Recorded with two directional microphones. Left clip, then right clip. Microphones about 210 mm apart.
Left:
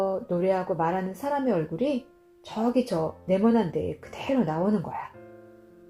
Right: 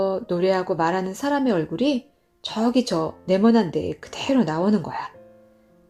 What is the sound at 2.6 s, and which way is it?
Speech, 50° right (ahead or behind).